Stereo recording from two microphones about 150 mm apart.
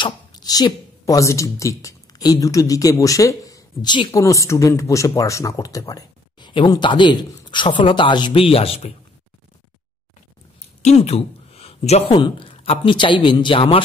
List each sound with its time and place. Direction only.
0.0 s a woman's voice: 25° left (ahead or behind)
10.8 s a sound: 45° left (ahead or behind)
12.1 s a man's voice: 30° left (ahead or behind)